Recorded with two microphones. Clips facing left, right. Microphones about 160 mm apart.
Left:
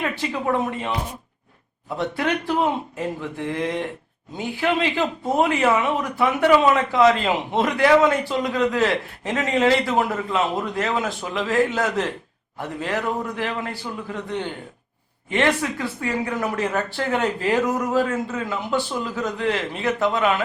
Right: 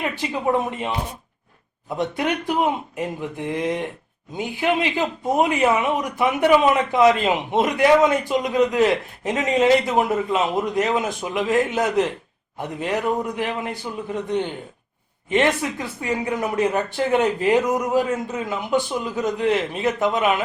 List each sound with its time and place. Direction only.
0.0 s a man's voice: 15° right (ahead or behind)
2.0 s a man's voice: 20° right (ahead or behind)